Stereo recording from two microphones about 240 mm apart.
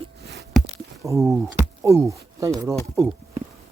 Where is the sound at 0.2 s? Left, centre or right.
Right.